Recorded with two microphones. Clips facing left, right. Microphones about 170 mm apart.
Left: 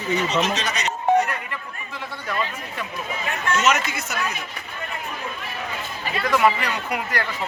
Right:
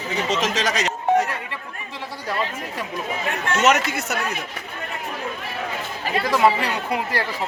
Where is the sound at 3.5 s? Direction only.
60° right (ahead or behind).